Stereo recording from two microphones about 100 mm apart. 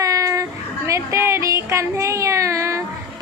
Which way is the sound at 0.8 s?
30° right (ahead or behind).